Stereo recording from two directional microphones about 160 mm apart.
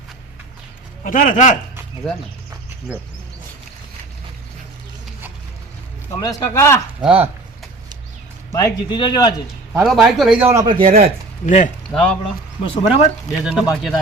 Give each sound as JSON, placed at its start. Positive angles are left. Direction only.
{"t": 1.0, "sound": "speech", "side_deg": 55}
{"t": 6.1, "sound": "speech", "side_deg": 20}
{"t": 7.0, "sound": "speech", "side_deg": -10}
{"t": 8.5, "sound": "speech", "side_deg": 25}
{"t": 9.7, "sound": "a man's voice", "side_deg": 0}
{"t": 10.4, "sound": "a man's voice", "side_deg": -20}
{"t": 10.7, "sound": "a man's voice", "side_deg": -30}
{"t": 11.4, "sound": "speech", "side_deg": 50}
{"t": 11.9, "sound": "speech", "side_deg": 5}
{"t": 12.6, "sound": "speech", "side_deg": 40}
{"t": 13.4, "sound": "a man's voice", "side_deg": -5}